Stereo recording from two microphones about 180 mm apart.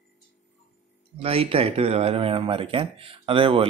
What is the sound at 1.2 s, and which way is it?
Speech, 35° right (ahead or behind).